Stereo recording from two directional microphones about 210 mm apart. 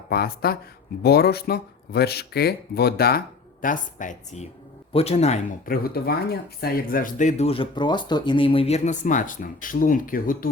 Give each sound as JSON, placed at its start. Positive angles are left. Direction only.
{"t": 0.1, "sound": "speech", "side_deg": 45}